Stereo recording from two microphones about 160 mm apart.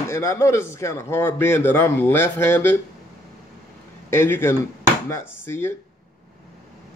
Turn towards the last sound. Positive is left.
turn(degrees=15)  # may be behind; listen again after turning